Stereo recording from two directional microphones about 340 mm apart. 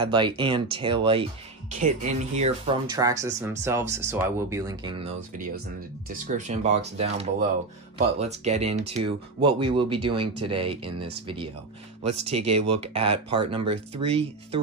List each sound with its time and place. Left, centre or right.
0.0 s speech: centre
6.0 s speech: right
12.3 s speech: centre